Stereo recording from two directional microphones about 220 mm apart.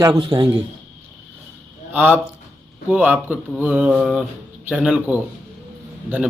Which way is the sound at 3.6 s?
5° right (ahead or behind).